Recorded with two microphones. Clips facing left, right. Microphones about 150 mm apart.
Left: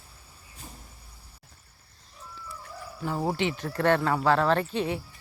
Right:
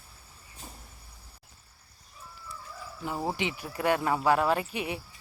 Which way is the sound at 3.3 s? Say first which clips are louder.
Left 5 dB; 15° right (ahead or behind).